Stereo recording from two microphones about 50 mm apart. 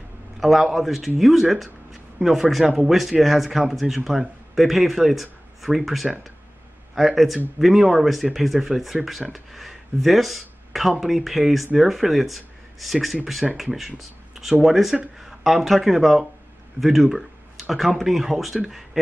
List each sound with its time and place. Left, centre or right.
0.4 s speech: centre